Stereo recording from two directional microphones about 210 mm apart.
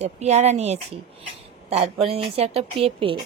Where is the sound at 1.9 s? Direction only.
25° right (ahead or behind).